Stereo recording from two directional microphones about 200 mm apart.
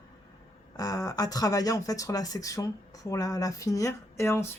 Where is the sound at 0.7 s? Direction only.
20° left (ahead or behind).